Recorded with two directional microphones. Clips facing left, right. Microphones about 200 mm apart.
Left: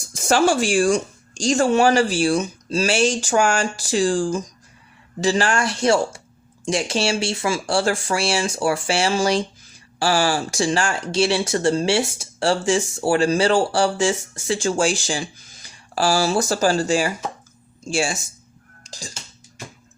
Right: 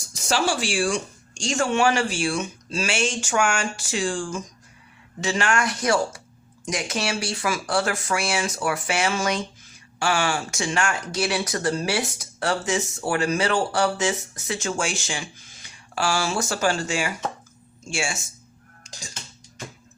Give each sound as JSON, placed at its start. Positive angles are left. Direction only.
{"t": 0.1, "sound": "speech", "side_deg": 50}
{"t": 18.8, "sound": "music", "side_deg": 35}